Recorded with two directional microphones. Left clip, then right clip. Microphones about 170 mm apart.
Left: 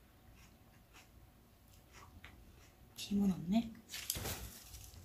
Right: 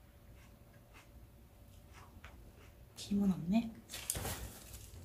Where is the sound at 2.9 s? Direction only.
15° right (ahead or behind).